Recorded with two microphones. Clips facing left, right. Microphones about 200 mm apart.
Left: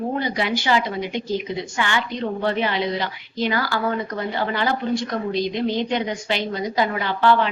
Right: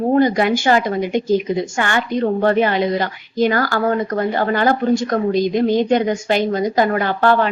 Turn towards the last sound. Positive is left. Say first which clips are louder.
# right 3 dB
turn(degrees=-50)  # may be behind; listen again after turning